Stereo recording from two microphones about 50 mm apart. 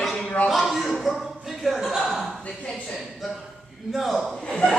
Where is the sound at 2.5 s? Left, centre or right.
Centre.